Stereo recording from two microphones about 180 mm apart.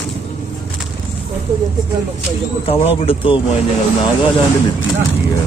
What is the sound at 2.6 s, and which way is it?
Speech, 30° left (ahead or behind).